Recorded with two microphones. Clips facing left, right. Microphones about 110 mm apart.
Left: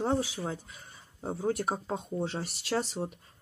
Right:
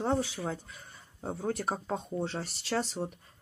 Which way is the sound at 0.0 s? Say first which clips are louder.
Left 1 dB; centre (ahead or behind).